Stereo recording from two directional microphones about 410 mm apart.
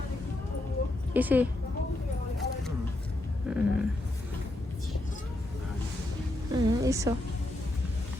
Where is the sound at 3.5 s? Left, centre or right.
Centre.